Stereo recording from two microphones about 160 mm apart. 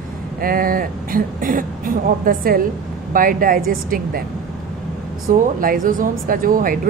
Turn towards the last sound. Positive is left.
turn(degrees=-65)  # may be behind; listen again after turning